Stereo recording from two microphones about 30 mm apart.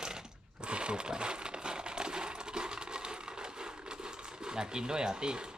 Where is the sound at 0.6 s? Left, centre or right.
Right.